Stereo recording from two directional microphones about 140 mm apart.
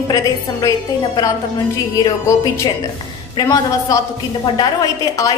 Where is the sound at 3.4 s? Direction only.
25° left (ahead or behind).